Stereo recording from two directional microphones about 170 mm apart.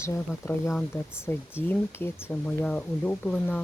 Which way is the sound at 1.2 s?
15° left (ahead or behind).